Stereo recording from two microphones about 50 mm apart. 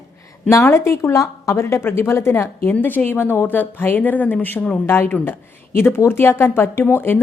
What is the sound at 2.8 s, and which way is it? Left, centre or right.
A woman's voice, left.